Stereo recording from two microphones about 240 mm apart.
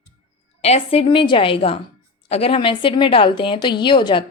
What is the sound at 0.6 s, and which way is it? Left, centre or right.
Speech, left.